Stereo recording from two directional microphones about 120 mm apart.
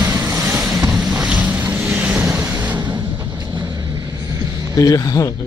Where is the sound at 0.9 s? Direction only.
5° right (ahead or behind).